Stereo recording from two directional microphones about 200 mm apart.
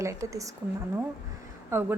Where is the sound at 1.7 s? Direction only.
10° right (ahead or behind).